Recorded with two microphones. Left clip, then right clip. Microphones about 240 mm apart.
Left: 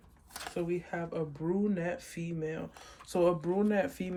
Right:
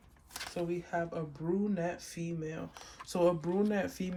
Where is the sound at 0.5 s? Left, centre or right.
Centre.